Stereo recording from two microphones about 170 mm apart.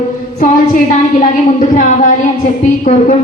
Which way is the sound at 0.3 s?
50° left (ahead or behind).